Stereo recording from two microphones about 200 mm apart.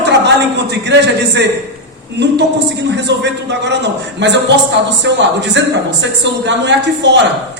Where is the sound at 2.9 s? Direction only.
60° right (ahead or behind).